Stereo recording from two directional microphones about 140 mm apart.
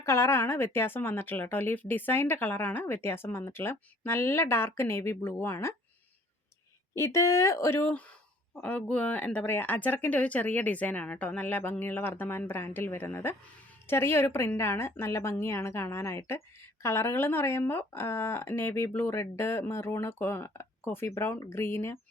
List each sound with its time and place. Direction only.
0.0 s speech: 20° left (ahead or behind)
6.9 s speech: 20° left (ahead or behind)